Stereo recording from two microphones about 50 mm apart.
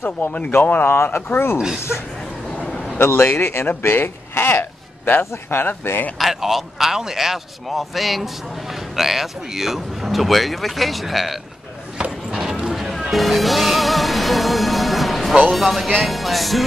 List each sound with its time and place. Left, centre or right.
0.5 s a man's voice: left
0.9 s a man's voice: left
3.0 s a man's voice: left
6.1 s speech: centre
12.3 s a sound: centre
13.0 s music: centre
15.5 s speech: centre